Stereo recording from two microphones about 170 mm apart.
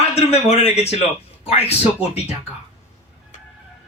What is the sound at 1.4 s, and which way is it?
Music, 35° left (ahead or behind).